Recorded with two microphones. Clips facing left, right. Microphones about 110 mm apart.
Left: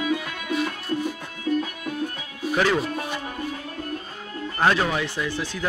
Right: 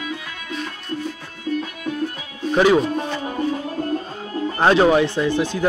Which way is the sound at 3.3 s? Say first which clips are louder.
Right 8 dB; 40° right (ahead or behind).